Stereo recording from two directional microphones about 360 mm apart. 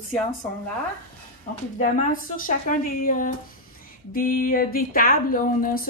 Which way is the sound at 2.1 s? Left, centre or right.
Left.